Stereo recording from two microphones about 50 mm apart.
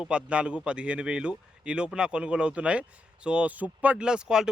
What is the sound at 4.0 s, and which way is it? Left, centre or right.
Speech, centre.